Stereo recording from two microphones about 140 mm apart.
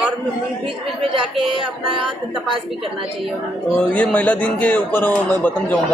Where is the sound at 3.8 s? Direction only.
10° left (ahead or behind).